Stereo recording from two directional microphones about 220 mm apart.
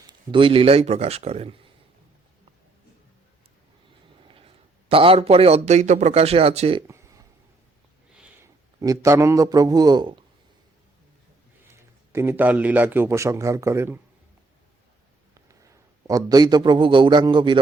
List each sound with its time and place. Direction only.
0.1 s speech: 25° right (ahead or behind)
4.4 s a man's voice: 25° right (ahead or behind)
6.8 s a sound: 15° right (ahead or behind)
8.8 s a man's voice: 15° right (ahead or behind)
11.7 s a man's voice: 10° right (ahead or behind)
15.4 s a man's voice: 15° right (ahead or behind)